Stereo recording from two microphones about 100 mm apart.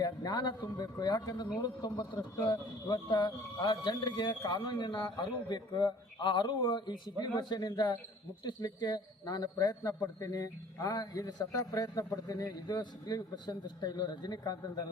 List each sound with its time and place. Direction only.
0.0 s a man's voice: 45° left (ahead or behind)